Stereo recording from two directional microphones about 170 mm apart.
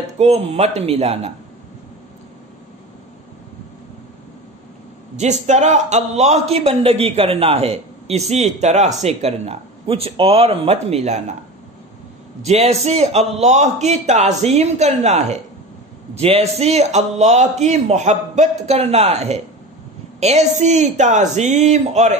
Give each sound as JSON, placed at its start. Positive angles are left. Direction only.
{"t": 0.0, "sound": "a man's voice", "side_deg": -40}
{"t": 5.1, "sound": "a man's voice", "side_deg": -45}
{"t": 12.4, "sound": "a man's voice", "side_deg": -40}